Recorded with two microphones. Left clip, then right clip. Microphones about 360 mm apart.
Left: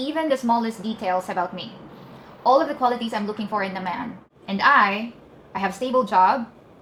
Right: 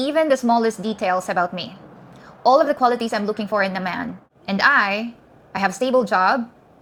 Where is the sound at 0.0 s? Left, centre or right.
Right.